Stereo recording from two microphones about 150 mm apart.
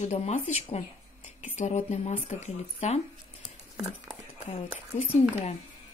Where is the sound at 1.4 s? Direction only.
50° left (ahead or behind).